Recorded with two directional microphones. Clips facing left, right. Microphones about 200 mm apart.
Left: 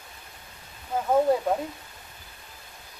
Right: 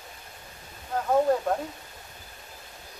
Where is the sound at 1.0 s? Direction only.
10° left (ahead or behind).